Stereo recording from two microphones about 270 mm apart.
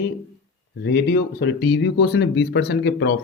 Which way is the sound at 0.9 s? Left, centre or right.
Left.